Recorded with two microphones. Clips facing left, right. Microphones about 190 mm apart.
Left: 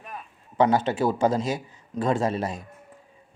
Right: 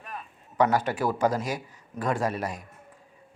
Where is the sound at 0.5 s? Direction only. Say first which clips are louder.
Left 3 dB; 25° left (ahead or behind).